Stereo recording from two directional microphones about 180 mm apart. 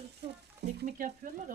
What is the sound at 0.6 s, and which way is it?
Speech, 65° right (ahead or behind).